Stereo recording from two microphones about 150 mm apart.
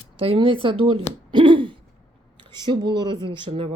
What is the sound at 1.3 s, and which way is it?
Hoot, 35° right (ahead or behind).